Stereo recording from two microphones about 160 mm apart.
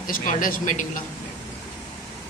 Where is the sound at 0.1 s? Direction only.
55° left (ahead or behind).